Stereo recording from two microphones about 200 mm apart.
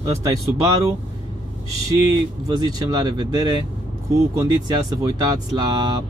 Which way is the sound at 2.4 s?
20° right (ahead or behind).